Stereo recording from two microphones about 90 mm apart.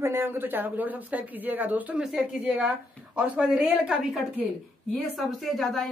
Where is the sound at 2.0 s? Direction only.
10° right (ahead or behind).